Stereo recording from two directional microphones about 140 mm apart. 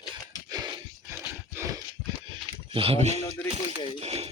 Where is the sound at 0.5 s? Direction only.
30° right (ahead or behind).